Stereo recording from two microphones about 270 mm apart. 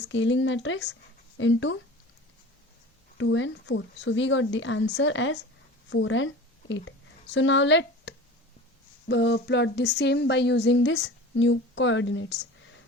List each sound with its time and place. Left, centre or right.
0.1 s speech: left
3.2 s speech: left